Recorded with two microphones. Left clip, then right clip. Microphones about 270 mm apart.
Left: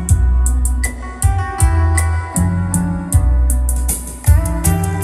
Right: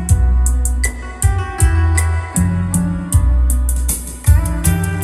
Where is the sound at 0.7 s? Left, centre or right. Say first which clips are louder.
Right 2 dB; centre.